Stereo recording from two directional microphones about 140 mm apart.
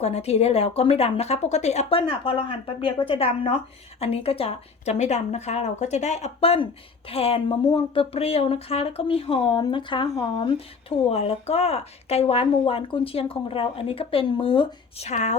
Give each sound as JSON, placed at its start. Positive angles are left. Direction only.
{"t": 0.0, "sound": "speech", "side_deg": 50}
{"t": 15.0, "sound": "speech", "side_deg": 55}